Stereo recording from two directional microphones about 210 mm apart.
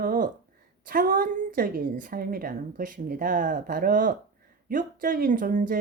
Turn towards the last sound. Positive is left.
turn(degrees=-40)  # may be behind; listen again after turning